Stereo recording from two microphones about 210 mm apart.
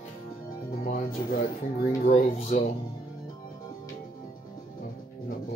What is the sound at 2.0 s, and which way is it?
Speech, 35° left (ahead or behind).